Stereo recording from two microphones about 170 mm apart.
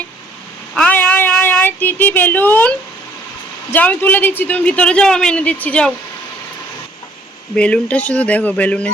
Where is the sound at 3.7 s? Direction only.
10° left (ahead or behind).